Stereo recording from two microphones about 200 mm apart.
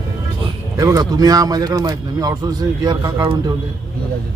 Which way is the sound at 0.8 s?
15° right (ahead or behind).